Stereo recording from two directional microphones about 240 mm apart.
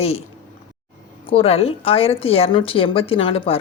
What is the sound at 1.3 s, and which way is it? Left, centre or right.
A woman's voice, left.